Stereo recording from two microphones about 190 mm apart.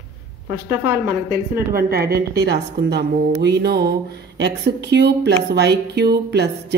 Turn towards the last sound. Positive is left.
turn(degrees=-60)  # may be behind; listen again after turning